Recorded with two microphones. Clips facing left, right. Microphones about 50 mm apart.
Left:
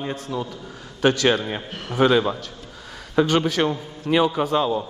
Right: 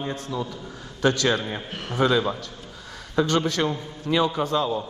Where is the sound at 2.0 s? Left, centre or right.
Left.